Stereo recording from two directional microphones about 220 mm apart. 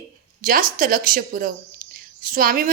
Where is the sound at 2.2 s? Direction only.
40° right (ahead or behind).